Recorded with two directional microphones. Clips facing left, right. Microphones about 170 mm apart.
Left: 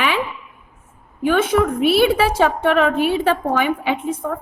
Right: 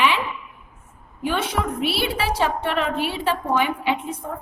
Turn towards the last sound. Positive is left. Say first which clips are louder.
# left 4 dB
turn(degrees=50)  # may be behind; listen again after turning